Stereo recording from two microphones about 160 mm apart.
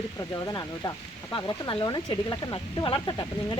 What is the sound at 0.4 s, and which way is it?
Speech, 20° left (ahead or behind).